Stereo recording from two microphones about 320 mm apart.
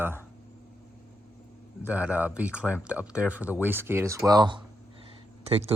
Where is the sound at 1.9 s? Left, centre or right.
Centre.